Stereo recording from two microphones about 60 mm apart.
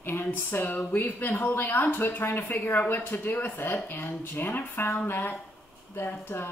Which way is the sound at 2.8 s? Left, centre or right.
Left.